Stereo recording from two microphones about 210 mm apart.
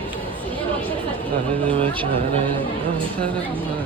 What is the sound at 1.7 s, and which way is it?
Speech, 25° right (ahead or behind).